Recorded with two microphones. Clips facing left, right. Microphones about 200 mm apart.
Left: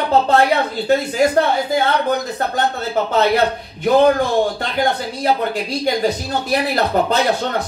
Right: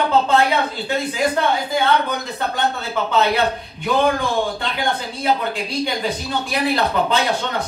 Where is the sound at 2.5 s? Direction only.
40° left (ahead or behind).